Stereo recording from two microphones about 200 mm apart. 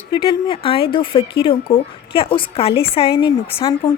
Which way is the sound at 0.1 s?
20° left (ahead or behind).